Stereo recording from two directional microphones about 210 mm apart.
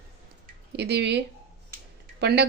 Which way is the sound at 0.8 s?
55° right (ahead or behind).